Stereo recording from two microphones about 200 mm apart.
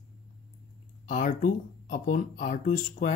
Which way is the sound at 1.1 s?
40° left (ahead or behind).